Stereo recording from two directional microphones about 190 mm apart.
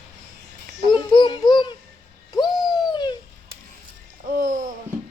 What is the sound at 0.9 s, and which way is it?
Speech, 25° left (ahead or behind).